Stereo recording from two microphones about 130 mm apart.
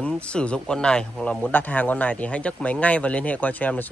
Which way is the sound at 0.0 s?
10° left (ahead or behind).